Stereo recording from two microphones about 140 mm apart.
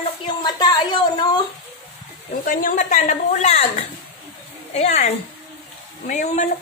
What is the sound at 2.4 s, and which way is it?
A woman's voice, 80° left.